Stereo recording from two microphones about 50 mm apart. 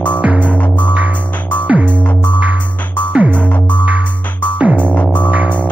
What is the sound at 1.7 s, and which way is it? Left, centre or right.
Music, right.